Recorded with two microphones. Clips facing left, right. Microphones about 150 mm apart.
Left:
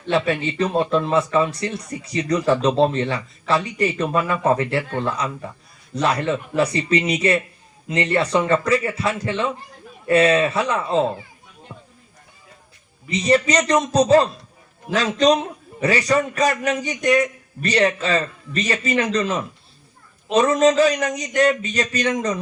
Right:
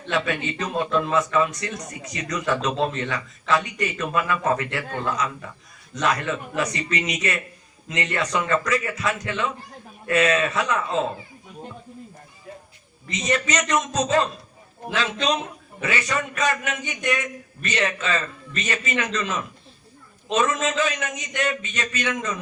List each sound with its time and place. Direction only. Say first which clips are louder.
0.0 s speech: left 5 dB; 30° left (ahead or behind)
13.1 s speech: left 7 dB; 30° left (ahead or behind)